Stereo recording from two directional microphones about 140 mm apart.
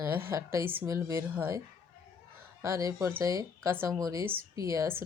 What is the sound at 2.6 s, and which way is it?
Speech, 20° right (ahead or behind).